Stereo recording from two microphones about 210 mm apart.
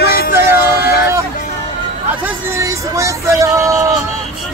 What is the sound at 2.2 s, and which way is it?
Speech, 10° right (ahead or behind).